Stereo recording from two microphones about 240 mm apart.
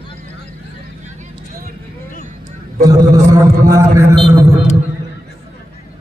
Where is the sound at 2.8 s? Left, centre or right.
Centre.